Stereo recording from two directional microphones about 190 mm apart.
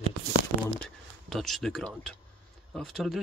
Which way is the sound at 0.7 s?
Centre (ahead or behind).